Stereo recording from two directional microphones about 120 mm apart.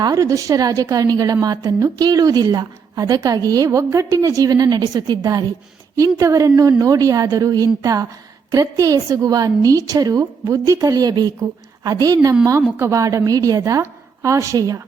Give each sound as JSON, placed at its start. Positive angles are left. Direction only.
{"t": 0.0, "sound": "a woman's voice", "side_deg": -30}